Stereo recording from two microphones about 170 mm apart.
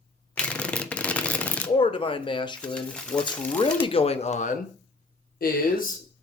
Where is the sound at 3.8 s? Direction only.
35° left (ahead or behind).